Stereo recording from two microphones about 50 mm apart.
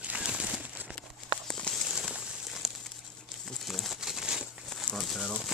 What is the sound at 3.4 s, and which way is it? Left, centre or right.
Crumpling, centre.